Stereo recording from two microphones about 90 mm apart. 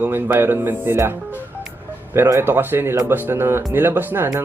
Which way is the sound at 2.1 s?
30° right (ahead or behind).